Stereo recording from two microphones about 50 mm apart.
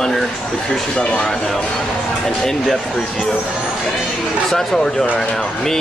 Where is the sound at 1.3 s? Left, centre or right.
Centre.